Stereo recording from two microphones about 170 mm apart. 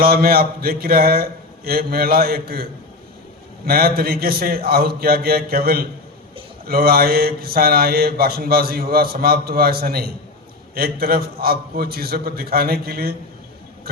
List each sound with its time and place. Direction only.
0.0 s mantra: 60° right (ahead or behind)
3.7 s mantra: 60° right (ahead or behind)